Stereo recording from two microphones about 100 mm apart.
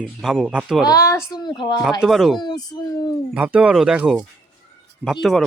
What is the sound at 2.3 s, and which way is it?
Speech, 45° left (ahead or behind).